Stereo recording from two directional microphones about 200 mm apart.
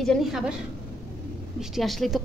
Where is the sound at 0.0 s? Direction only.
Centre (ahead or behind).